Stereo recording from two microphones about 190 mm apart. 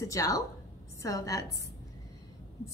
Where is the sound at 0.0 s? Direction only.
15° left (ahead or behind).